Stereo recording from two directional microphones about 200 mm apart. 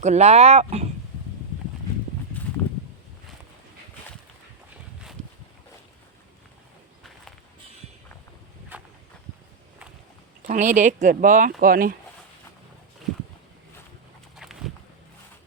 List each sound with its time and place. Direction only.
0.0 s speech: 35° right (ahead or behind)
8.7 s a sound: 10° right (ahead or behind)
10.4 s speech: 40° right (ahead or behind)